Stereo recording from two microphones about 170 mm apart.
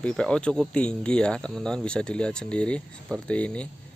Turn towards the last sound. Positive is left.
turn(degrees=5)  # may be behind; listen again after turning